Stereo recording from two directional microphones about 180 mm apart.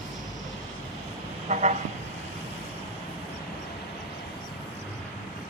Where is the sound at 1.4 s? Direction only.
40° right (ahead or behind).